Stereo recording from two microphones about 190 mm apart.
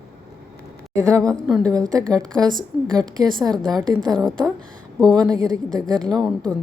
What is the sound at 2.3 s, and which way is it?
A woman's voice, 20° right (ahead or behind).